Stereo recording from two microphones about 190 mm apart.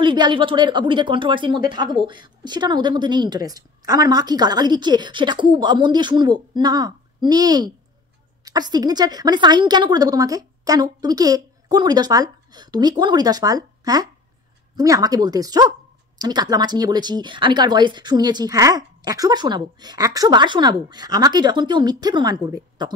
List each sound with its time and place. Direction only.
0.0 s speech: 25° right (ahead or behind)